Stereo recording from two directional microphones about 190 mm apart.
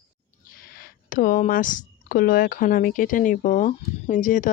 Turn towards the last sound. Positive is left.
turn(degrees=40)  # may be behind; listen again after turning